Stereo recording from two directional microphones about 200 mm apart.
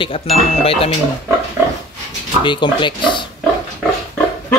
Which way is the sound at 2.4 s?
25° left (ahead or behind).